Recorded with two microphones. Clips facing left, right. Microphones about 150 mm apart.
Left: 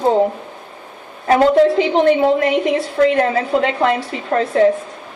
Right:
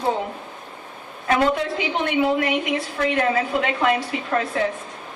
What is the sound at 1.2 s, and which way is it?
A woman's voice, 35° left (ahead or behind).